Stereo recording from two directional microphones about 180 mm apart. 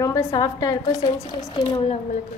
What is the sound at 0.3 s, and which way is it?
A woman's voice, 20° left (ahead or behind).